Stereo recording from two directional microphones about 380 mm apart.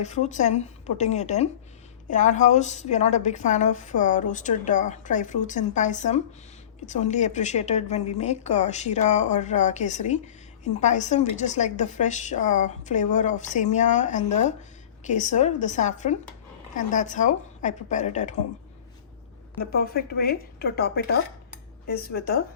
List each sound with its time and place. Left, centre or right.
0.0 s a woman's voice: centre
19.5 s speech: left